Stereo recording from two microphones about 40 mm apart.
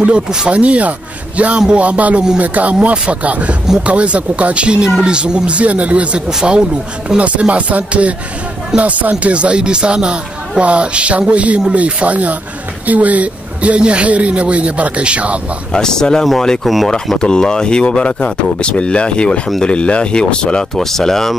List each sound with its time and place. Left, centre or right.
0.5 s speech: right
6.2 s speech: right
7.2 s speech: right
15.7 s speech: centre
16.6 s speech: centre
17.2 s speech: centre
20.7 s speech: centre